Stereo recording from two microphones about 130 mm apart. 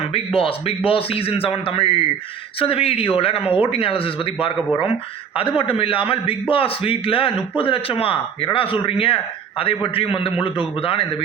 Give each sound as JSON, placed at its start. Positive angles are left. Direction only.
{"t": 0.3, "sound": "a man's voice", "side_deg": 45}